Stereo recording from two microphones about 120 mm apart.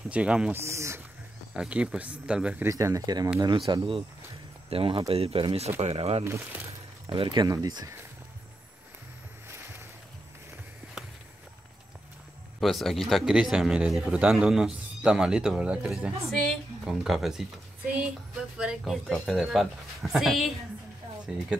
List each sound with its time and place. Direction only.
0.1 s speech: 10° right (ahead or behind)
0.6 s speech: 25° right (ahead or behind)
1.5 s speech: 10° right (ahead or behind)
2.7 s speech: 30° right (ahead or behind)
3.3 s speech: 40° right (ahead or behind); by 6.2 s 60° right (ahead or behind)
7.1 s speech: 45° right (ahead or behind)
12.5 s speech: centre (ahead or behind)
18.6 s speech: 5° right (ahead or behind)